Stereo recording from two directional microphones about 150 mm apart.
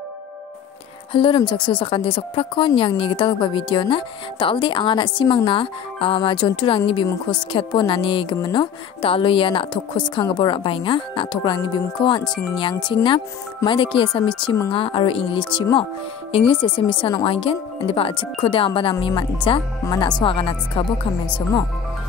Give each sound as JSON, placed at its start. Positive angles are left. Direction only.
{"t": 1.1, "sound": "speech", "side_deg": 35}